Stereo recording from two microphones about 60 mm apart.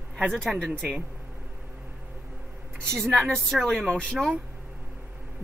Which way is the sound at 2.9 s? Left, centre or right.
Centre.